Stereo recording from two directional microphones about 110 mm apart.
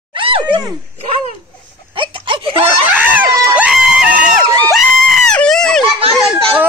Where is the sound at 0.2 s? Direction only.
55° right (ahead or behind).